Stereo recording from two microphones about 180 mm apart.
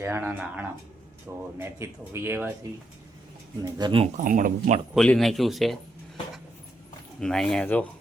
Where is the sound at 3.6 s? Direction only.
25° right (ahead or behind); by 4.8 s 45° right (ahead or behind).